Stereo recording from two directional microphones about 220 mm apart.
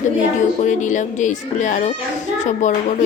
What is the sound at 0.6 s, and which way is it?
Speech, 35° left (ahead or behind).